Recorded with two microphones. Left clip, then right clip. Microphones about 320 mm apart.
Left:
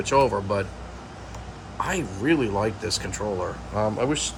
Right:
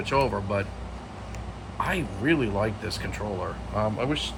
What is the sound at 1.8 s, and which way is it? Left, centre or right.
Speech, centre.